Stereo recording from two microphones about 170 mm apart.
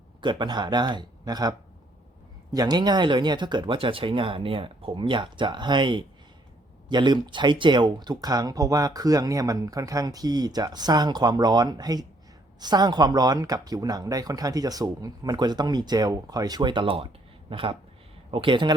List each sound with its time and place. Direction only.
0.2 s speech: 25° right (ahead or behind)